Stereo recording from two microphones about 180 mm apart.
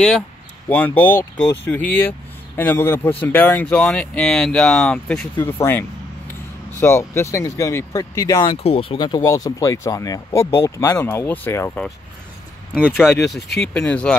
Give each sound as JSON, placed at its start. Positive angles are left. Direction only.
{"t": 0.7, "sound": "speech", "side_deg": 10}
{"t": 5.6, "sound": "vehicle", "side_deg": 10}
{"t": 6.8, "sound": "speech", "side_deg": 15}
{"t": 8.6, "sound": "speech", "side_deg": 30}
{"t": 12.8, "sound": "speech", "side_deg": 0}